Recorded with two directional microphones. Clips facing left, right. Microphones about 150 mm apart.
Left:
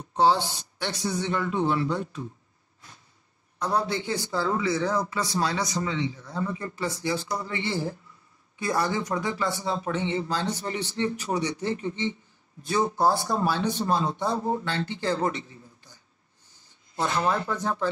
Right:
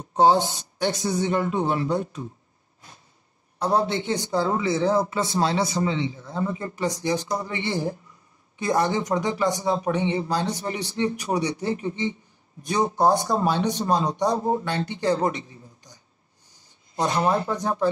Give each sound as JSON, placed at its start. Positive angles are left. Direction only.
{"t": 0.1, "sound": "speech", "side_deg": -45}
{"t": 3.5, "sound": "a man's voice", "side_deg": -30}
{"t": 15.1, "sound": "a sound", "side_deg": -20}
{"t": 16.9, "sound": "a man's voice", "side_deg": -20}